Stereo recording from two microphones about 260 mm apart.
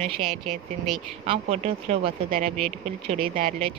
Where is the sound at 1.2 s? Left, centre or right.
Right.